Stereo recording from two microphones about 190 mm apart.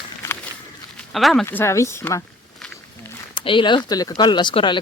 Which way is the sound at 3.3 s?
25° left (ahead or behind).